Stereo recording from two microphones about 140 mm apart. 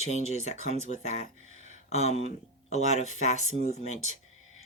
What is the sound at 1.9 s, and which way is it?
Speech, 50° left (ahead or behind).